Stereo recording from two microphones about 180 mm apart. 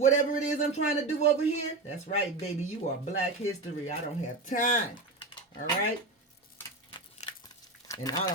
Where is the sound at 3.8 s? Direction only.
45° left (ahead or behind).